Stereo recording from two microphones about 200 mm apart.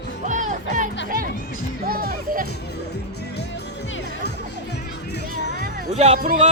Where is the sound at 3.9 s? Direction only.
55° left (ahead or behind).